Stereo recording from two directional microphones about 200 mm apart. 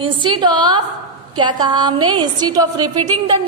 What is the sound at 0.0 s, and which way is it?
A woman's voice, 25° right (ahead or behind).